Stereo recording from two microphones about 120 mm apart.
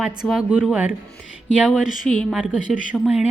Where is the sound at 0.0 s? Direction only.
5° right (ahead or behind).